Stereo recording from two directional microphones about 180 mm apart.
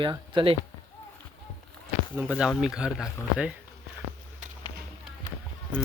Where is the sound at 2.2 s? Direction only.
5° right (ahead or behind).